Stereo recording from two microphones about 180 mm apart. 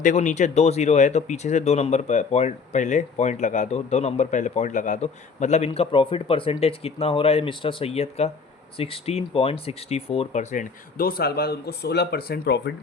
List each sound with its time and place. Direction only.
0.0 s speech: 45° left (ahead or behind); by 12.7 s 65° left (ahead or behind)